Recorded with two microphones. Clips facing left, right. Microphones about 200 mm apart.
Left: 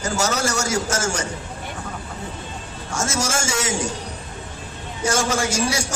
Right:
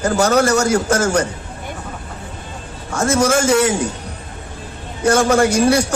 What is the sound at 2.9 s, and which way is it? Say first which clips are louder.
Music: right 9 dB; 60° right (ahead or behind).